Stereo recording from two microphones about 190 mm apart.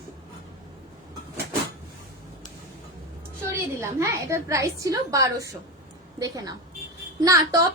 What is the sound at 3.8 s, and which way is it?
A woman's voice, 15° right (ahead or behind).